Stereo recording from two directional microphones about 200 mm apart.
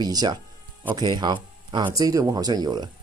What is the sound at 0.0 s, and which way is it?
Speech, 20° right (ahead or behind).